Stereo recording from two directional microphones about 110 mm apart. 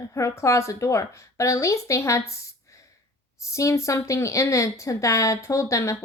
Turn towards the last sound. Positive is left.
turn(degrees=30)  # may be behind; listen again after turning